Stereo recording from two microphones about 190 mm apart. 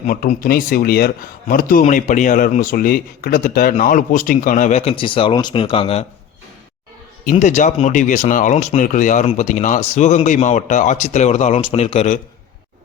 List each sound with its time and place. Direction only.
0.0 s speech: 45° left (ahead or behind)
7.3 s speech: 40° left (ahead or behind)